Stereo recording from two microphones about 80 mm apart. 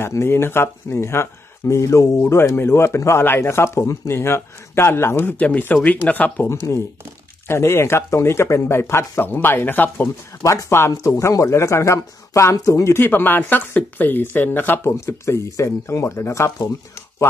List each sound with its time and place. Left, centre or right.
0.0 s speech: left
5.4 s speech: left
10.4 s speech: left
12.9 s speech: left
14.9 s speech: left